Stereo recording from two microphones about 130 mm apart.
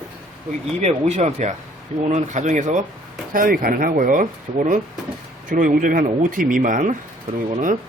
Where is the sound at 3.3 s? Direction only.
90° right.